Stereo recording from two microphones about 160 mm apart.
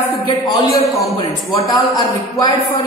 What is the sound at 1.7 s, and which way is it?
Speech, 25° left (ahead or behind).